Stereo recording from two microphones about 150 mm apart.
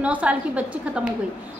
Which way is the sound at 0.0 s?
10° right (ahead or behind).